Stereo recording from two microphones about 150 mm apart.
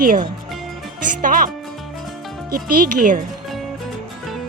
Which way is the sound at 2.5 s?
60° right (ahead or behind).